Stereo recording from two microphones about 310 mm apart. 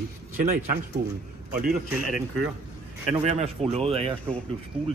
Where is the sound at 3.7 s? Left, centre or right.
Centre.